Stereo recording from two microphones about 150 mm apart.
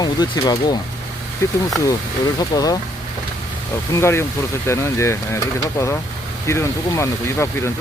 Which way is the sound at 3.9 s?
15° left (ahead or behind).